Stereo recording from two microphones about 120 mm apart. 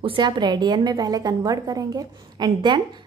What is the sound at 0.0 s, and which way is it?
A woman's voice, 45° right (ahead or behind).